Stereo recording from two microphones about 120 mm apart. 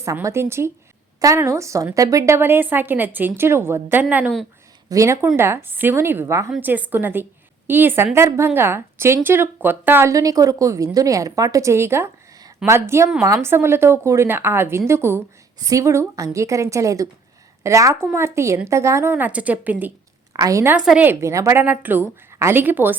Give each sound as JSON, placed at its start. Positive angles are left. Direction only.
{"t": 0.0, "sound": "a woman's voice", "side_deg": -25}
{"t": 12.6, "sound": "a woman's voice", "side_deg": -5}
{"t": 13.2, "sound": "a woman's voice", "side_deg": -25}
{"t": 20.3, "sound": "a woman's voice", "side_deg": -30}
{"t": 20.7, "sound": "a woman's voice", "side_deg": -10}